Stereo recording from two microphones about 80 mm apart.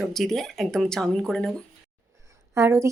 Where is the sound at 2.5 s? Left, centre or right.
Right.